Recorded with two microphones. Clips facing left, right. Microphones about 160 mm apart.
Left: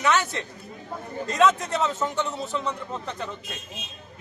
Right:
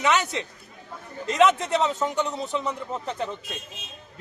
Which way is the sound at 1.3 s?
20° right (ahead or behind).